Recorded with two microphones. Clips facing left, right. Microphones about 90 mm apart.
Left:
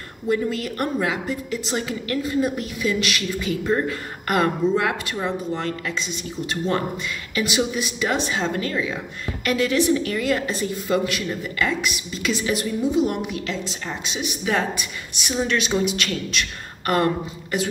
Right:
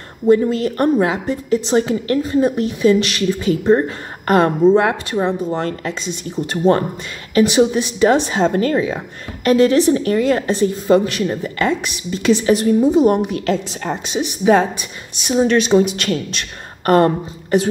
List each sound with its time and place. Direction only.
0.3 s a woman's voice: 30° right (ahead or behind)